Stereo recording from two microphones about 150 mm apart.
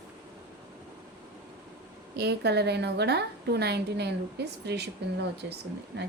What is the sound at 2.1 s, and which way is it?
A woman's voice, 90° right.